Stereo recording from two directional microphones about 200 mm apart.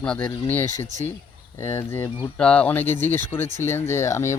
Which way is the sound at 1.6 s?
15° left (ahead or behind).